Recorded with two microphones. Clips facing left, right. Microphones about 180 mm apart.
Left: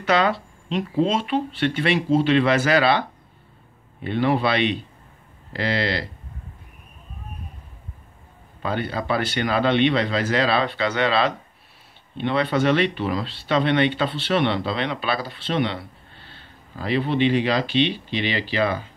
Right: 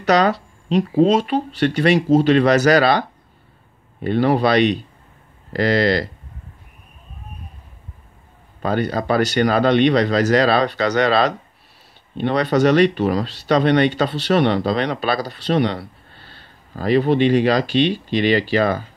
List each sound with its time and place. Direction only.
0.0 s speech: 40° right (ahead or behind)
8.6 s speech: 40° right (ahead or behind)